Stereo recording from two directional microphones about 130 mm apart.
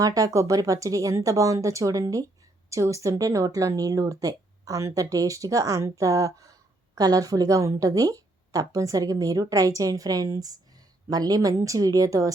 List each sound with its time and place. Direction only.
0.0 s speech: 25° right (ahead or behind)